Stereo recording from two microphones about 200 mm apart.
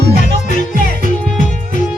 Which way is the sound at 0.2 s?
40° left (ahead or behind).